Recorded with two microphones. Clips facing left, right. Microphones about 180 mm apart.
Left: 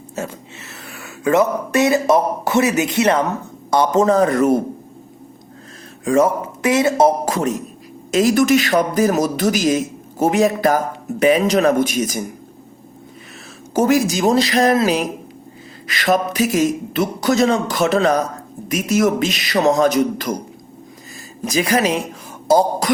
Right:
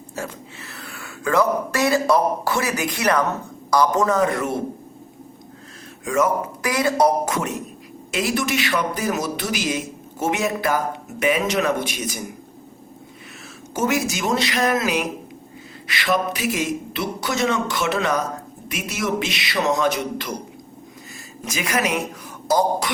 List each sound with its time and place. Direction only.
0.2 s a man's voice: 20° left (ahead or behind); by 4.6 s 40° left (ahead or behind)
6.1 s speech: 30° left (ahead or behind)
8.1 s a man's voice: 40° left (ahead or behind)
13.7 s a man's voice: 35° left (ahead or behind)
21.4 s a man's voice: 35° left (ahead or behind)